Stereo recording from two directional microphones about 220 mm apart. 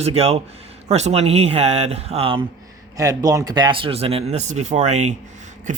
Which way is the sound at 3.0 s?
15° right (ahead or behind).